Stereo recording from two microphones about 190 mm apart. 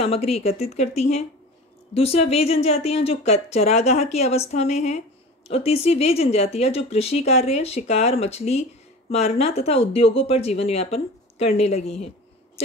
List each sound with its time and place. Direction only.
0.0 s speech: 30° left (ahead or behind)